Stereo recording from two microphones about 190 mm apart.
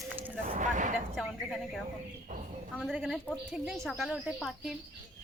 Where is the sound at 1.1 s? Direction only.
Centre (ahead or behind).